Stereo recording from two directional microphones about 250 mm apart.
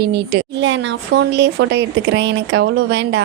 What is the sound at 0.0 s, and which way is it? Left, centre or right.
A woman's voice, right.